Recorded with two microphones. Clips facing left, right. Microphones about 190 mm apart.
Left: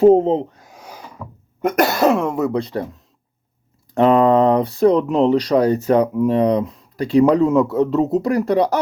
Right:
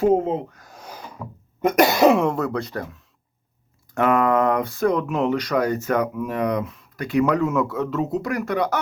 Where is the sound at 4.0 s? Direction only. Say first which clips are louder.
Left 6 dB; 30° left (ahead or behind).